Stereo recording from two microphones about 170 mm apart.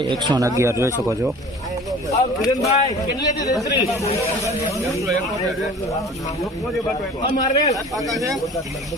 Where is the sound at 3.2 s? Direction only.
20° left (ahead or behind).